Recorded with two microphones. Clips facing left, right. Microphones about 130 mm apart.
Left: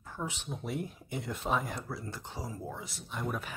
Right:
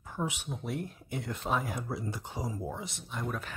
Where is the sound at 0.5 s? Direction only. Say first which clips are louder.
Even; centre (ahead or behind).